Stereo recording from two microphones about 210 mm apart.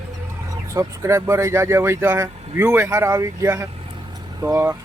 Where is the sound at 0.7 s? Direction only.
15° right (ahead or behind).